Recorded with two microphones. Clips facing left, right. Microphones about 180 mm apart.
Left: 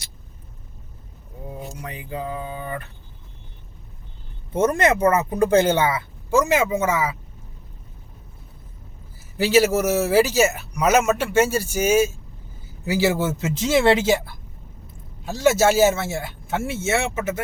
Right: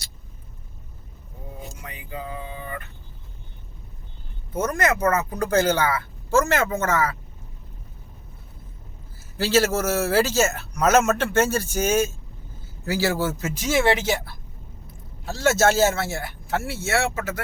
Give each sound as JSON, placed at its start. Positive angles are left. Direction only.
{"t": 1.8, "sound": "speech", "side_deg": 35}
{"t": 4.5, "sound": "speech", "side_deg": 30}
{"t": 9.4, "sound": "speech", "side_deg": 15}